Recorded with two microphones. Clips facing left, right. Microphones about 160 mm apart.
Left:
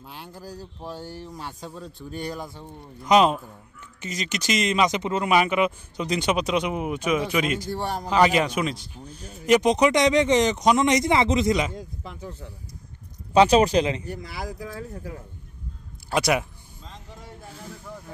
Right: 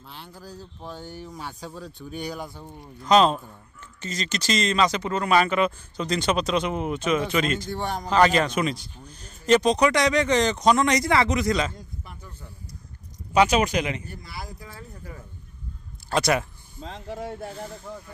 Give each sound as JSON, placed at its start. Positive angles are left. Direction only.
{"t": 0.0, "sound": "speech", "side_deg": 10}
{"t": 1.1, "sound": "speech", "side_deg": 0}
{"t": 3.0, "sound": "speech", "side_deg": 15}
{"t": 9.6, "sound": "speech", "side_deg": 20}
{"t": 11.7, "sound": "speech", "side_deg": 90}
{"t": 13.3, "sound": "speech", "side_deg": 30}
{"t": 14.0, "sound": "speech", "side_deg": 90}
{"t": 16.1, "sound": "speech", "side_deg": 10}
{"t": 16.8, "sound": "speech", "side_deg": -70}